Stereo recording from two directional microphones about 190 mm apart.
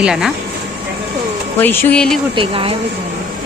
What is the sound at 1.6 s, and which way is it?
Speech, 10° left (ahead or behind).